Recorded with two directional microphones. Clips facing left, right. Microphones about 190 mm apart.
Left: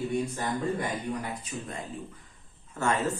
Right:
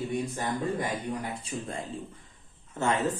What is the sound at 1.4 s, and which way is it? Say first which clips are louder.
Speech: right 2 dB; 30° right (ahead or behind).